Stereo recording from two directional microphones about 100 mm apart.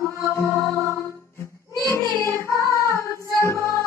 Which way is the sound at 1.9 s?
30° left (ahead or behind).